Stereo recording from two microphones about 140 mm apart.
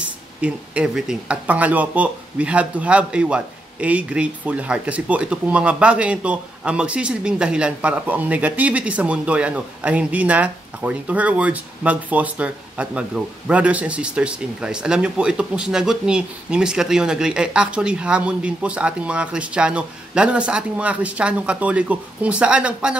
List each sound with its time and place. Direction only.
0.4 s speech: 5° right (ahead or behind)